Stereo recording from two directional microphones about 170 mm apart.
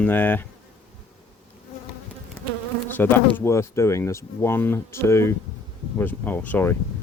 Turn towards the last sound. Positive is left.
turn(degrees=10)  # may be behind; listen again after turning